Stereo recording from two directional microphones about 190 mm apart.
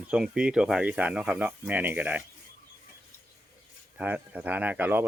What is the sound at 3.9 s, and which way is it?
Speech, 10° right (ahead or behind).